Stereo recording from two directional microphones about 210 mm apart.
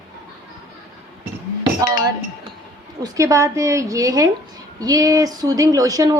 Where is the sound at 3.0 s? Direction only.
15° right (ahead or behind).